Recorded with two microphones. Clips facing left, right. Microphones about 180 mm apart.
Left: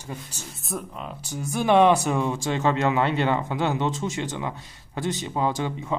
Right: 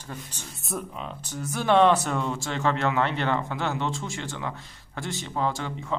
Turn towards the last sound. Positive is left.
turn(degrees=15)  # may be behind; listen again after turning